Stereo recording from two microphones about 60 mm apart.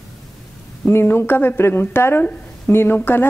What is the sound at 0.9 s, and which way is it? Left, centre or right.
A woman's voice, left.